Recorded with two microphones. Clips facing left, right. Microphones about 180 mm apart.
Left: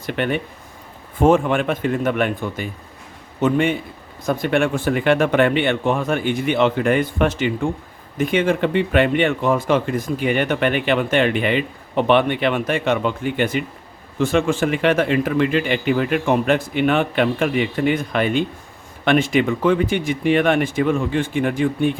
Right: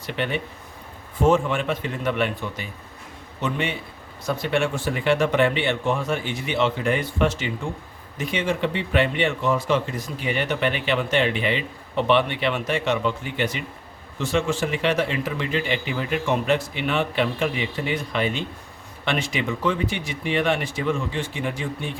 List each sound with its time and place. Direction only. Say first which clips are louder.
0.0 s speech: left 5 dB; 50° left (ahead or behind)